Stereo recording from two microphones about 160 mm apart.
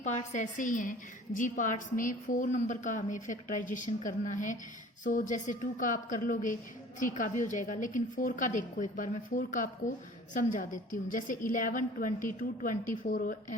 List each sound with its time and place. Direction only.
0.0 s a woman's voice: 45° left (ahead or behind)